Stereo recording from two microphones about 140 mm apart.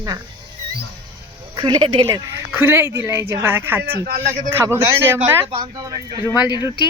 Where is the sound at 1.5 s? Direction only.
30° right (ahead or behind).